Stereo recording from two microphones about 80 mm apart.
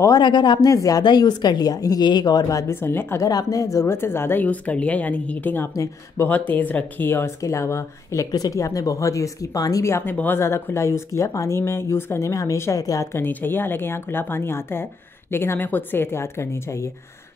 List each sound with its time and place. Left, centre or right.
0.2 s speech: left
0.7 s speech: left
1.0 s speech: left
1.7 s speech: left
2.7 s a woman's voice: left
3.3 s speech: left
3.8 s speech: left
8.3 s speech: left
10.1 s speech: left
10.4 s a woman's voice: left
13.2 s a woman's voice: left